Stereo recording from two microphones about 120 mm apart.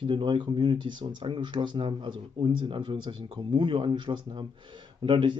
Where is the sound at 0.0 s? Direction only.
45° right (ahead or behind).